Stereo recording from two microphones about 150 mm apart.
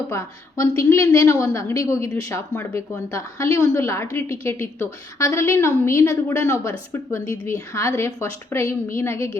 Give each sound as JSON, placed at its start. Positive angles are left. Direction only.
{"t": 0.1, "sound": "a woman's voice", "side_deg": 20}